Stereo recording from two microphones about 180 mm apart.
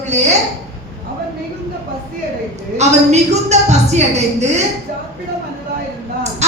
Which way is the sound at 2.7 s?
40° right (ahead or behind).